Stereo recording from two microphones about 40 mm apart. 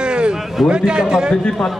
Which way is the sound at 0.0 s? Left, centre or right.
Right.